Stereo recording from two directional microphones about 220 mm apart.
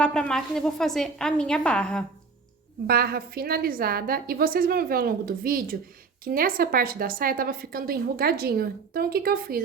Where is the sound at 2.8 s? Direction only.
45° right (ahead or behind).